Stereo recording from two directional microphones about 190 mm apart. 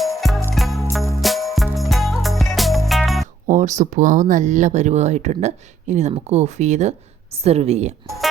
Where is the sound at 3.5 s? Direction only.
40° right (ahead or behind).